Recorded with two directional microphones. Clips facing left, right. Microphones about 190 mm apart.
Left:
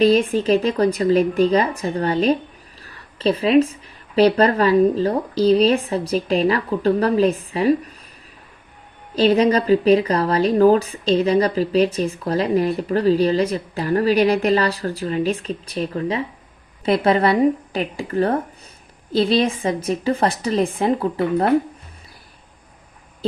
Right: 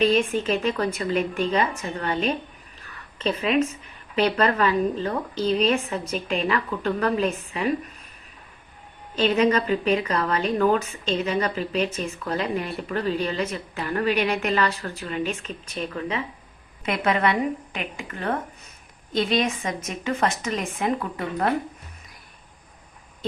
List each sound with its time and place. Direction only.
0.0 s a woman's voice: 35° left (ahead or behind)
9.1 s a woman's voice: 35° left (ahead or behind)